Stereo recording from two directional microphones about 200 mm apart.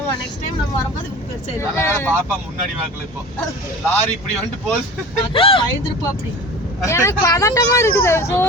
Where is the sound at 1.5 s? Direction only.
15° left (ahead or behind).